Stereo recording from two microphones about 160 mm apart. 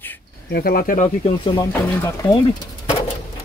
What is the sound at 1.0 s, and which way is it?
Speech, 40° left (ahead or behind).